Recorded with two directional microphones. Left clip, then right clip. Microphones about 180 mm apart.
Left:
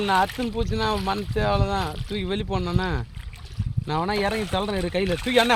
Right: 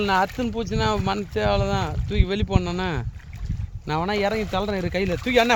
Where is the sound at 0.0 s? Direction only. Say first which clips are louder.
Even; 55° right (ahead or behind).